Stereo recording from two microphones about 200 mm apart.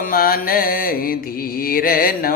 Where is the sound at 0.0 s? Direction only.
45° left (ahead or behind).